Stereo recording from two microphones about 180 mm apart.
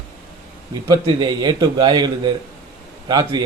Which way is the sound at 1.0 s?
25° right (ahead or behind).